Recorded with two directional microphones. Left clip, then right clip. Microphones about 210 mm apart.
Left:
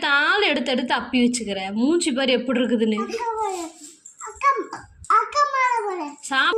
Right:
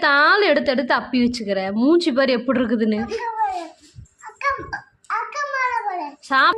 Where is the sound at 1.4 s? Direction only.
20° right (ahead or behind).